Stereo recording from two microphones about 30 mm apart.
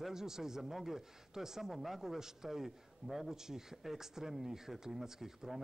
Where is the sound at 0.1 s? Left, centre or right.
Centre.